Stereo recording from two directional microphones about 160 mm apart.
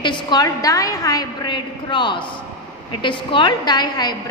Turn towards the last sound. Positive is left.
turn(degrees=25)  # may be behind; listen again after turning